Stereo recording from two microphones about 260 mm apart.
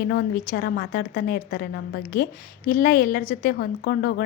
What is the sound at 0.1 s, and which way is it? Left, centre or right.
A woman's voice, left.